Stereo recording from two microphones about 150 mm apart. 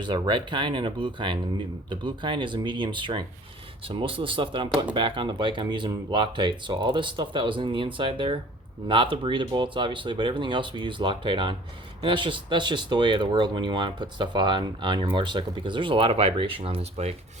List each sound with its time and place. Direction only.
0.0 s speech: 30° right (ahead or behind)